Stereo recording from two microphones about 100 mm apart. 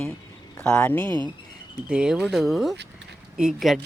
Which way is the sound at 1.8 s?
10° right (ahead or behind).